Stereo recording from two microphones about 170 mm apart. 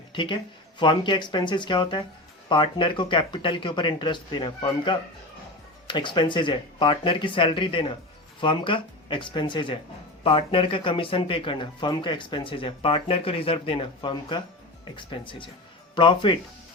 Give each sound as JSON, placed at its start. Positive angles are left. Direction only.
{"t": 0.1, "sound": "speech", "side_deg": 30}